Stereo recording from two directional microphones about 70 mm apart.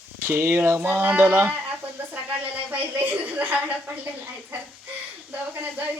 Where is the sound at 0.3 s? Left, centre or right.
Right.